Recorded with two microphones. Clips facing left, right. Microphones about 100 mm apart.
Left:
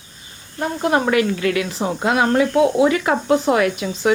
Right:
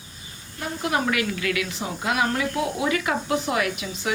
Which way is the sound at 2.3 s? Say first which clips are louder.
Left 10 dB; 60° left (ahead or behind).